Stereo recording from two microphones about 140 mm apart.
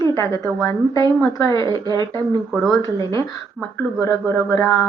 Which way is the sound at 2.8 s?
20° left (ahead or behind).